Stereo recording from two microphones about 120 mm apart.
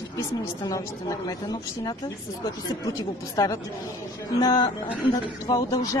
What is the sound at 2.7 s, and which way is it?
A woman's voice, 30° left (ahead or behind).